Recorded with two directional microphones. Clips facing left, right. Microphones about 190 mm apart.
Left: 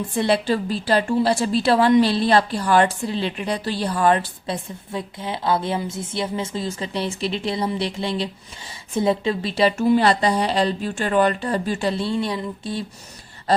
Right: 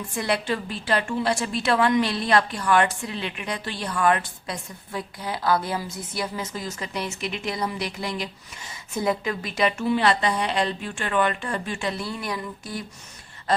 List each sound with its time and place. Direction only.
0.2 s a woman's voice: 30° left (ahead or behind)